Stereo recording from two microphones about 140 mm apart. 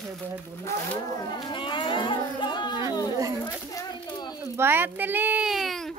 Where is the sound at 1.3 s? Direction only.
35° left (ahead or behind).